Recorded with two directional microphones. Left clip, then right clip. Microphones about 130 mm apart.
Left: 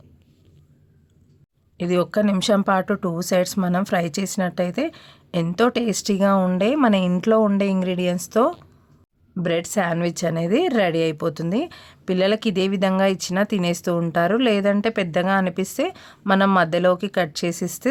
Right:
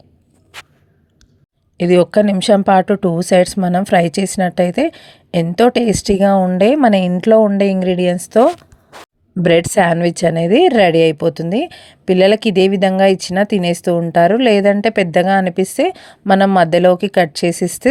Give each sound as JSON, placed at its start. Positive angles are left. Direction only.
{"t": 1.8, "sound": "speech", "side_deg": -45}
{"t": 9.4, "sound": "speech", "side_deg": -50}